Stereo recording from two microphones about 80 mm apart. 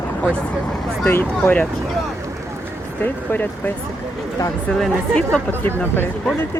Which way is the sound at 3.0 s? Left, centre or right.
Left.